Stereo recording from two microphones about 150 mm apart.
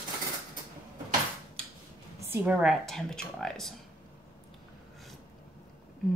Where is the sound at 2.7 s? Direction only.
5° left (ahead or behind).